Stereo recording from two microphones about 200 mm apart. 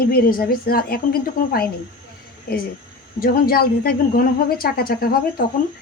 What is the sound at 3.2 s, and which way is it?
Speech, 45° left (ahead or behind).